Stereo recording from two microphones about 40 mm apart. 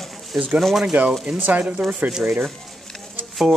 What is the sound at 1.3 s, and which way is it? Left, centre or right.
Speech, right.